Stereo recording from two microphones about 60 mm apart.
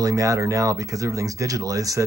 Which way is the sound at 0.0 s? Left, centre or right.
Right.